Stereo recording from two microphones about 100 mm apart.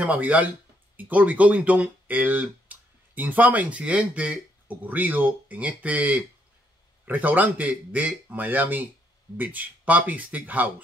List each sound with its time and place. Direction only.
0.0 s speech: 15° right (ahead or behind)